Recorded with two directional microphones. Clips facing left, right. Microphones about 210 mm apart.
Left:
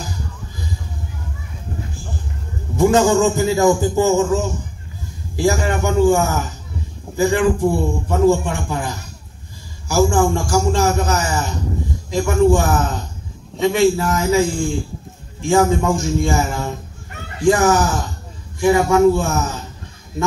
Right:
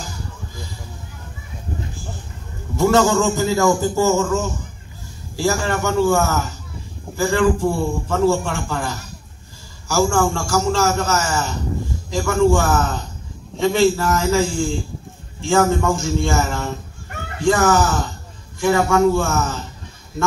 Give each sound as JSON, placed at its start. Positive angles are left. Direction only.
{"t": 2.8, "sound": "a man's voice", "side_deg": 15}